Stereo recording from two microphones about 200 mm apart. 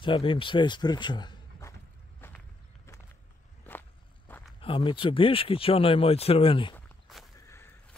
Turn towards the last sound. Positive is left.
turn(degrees=0)  # may be behind; listen again after turning